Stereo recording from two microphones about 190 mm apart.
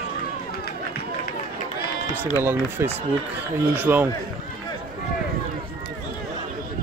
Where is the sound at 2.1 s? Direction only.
10° right (ahead or behind).